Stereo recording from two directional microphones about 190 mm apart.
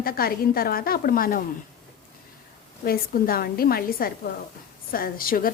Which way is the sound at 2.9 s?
50° left (ahead or behind).